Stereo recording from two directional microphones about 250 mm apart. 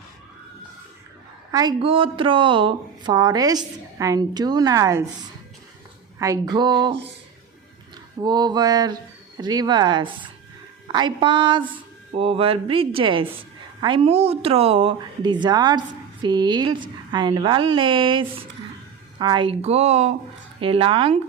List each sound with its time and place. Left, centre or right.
1.5 s a woman's voice: centre
6.1 s a woman's voice: centre
8.2 s a woman's voice: centre